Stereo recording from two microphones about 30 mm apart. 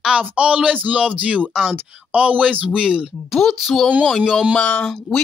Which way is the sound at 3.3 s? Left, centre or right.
Centre.